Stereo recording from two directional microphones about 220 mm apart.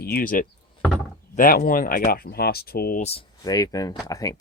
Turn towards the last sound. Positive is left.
turn(degrees=15)  # may be behind; listen again after turning